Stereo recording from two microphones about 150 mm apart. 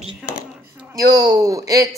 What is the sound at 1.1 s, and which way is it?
Speech, 25° right (ahead or behind).